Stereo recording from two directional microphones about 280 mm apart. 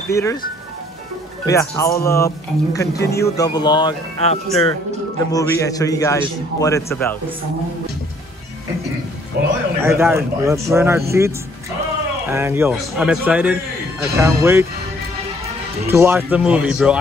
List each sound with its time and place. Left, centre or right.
0.1 s a man's voice: centre
1.4 s a man's voice: centre
9.4 s music: right
9.8 s a man's voice: centre
15.9 s speech: centre